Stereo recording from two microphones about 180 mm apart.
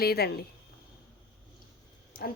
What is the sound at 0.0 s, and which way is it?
Speech, 60° left (ahead or behind).